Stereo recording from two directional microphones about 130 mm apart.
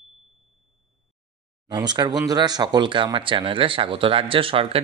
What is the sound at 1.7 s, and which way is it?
Speech, 35° right (ahead or behind).